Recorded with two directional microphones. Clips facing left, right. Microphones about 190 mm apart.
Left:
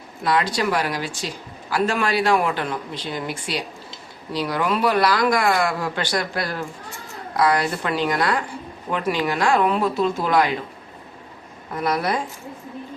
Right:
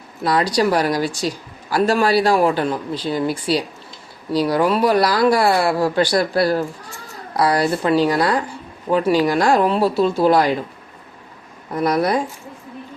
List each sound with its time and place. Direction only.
0.3 s speech: 35° right (ahead or behind)
11.8 s speech: 40° right (ahead or behind)